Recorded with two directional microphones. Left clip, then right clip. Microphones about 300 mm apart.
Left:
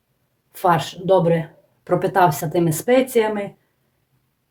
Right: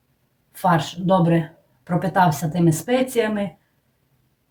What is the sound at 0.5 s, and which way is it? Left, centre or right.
Speech, left.